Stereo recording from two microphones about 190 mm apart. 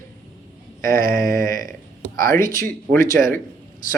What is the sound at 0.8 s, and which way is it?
Speech, 50° right (ahead or behind).